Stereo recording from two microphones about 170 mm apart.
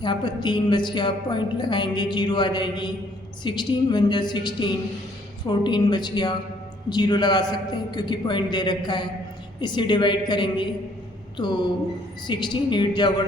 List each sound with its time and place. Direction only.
0.0 s a woman's voice: 25° left (ahead or behind)